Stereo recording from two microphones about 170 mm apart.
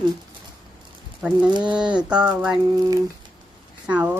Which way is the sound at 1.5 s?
25° right (ahead or behind).